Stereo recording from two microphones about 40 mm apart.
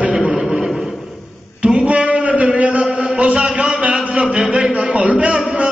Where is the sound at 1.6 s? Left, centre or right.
Right.